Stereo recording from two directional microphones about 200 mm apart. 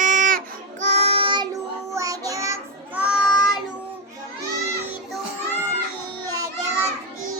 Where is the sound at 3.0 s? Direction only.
5° right (ahead or behind).